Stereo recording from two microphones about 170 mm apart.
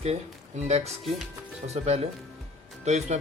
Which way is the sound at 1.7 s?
40° right (ahead or behind).